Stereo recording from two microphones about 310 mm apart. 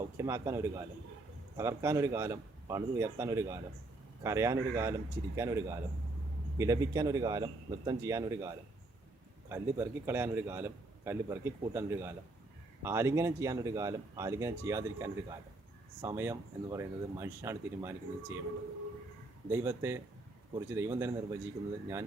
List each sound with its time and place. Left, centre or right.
0.2 s a man's voice: centre
19.5 s a man's voice: centre